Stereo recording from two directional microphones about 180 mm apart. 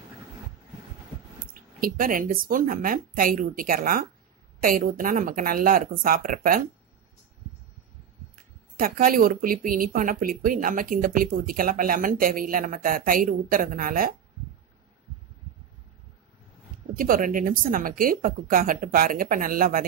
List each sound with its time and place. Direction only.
1.5 s speech: 50° right (ahead or behind)
8.7 s speech: 50° right (ahead or behind)
16.9 s speech: 50° right (ahead or behind)